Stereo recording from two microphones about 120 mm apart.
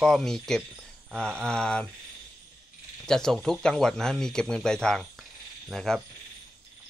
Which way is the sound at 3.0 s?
5° left (ahead or behind).